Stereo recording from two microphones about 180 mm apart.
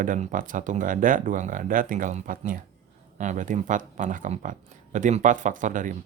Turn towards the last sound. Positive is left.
turn(degrees=-45)  # may be behind; listen again after turning